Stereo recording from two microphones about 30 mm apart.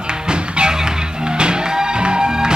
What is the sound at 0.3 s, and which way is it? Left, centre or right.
Music, right.